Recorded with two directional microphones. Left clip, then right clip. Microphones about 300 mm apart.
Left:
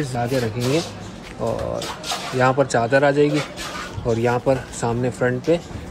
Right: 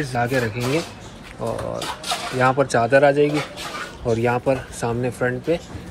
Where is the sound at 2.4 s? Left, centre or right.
Centre.